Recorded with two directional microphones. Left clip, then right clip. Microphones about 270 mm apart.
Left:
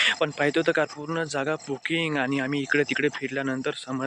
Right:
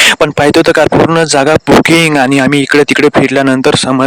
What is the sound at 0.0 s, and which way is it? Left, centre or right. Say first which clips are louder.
Speech: right 16 dB; right.